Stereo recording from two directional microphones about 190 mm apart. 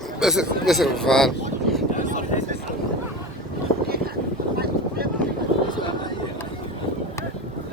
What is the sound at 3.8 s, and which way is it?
Vehicle, 55° right (ahead or behind).